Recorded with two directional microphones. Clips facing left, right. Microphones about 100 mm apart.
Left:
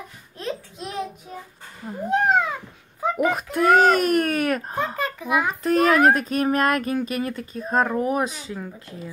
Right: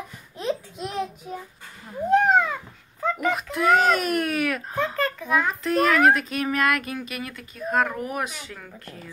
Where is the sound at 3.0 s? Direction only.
10° left (ahead or behind).